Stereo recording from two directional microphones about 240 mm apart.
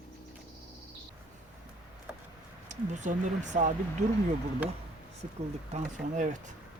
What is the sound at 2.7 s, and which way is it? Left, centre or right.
Speech, right.